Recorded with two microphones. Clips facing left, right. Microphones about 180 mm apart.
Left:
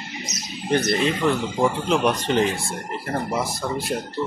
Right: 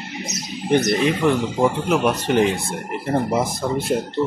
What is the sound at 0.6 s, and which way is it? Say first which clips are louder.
Speech: right 3 dB; 15° right (ahead or behind).